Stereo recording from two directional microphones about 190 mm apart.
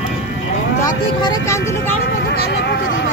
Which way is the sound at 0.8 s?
20° left (ahead or behind).